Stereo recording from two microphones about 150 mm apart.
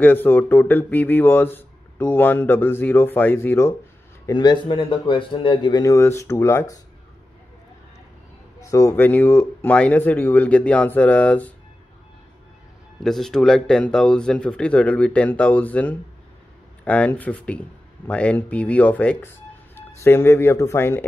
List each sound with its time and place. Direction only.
0.0 s speech: 15° left (ahead or behind)
4.3 s speech: 30° left (ahead or behind)
8.5 s speech: 20° left (ahead or behind)
13.0 s speech: centre (ahead or behind)